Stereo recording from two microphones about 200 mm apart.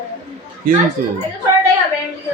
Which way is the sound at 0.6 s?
45° right (ahead or behind).